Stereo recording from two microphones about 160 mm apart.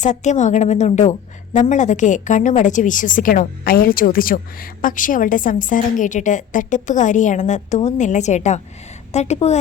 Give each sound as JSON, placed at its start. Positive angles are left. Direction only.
{"t": 0.0, "sound": "a woman's voice", "side_deg": 50}